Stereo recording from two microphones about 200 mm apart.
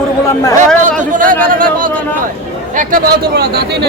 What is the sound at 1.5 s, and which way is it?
Speech, 45° right (ahead or behind).